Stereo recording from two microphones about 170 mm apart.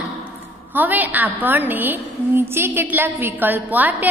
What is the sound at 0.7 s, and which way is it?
A woman's voice, 10° right (ahead or behind).